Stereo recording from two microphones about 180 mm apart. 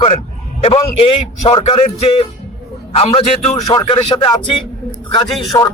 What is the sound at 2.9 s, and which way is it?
Speech, 35° left (ahead or behind).